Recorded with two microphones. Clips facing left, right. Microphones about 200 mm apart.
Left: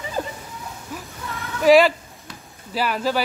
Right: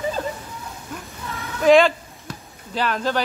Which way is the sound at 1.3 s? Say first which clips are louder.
Even; centre (ahead or behind).